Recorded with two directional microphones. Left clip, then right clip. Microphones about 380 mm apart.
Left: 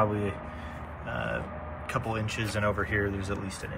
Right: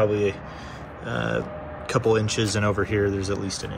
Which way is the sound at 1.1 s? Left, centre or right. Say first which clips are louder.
Right 6 dB; centre.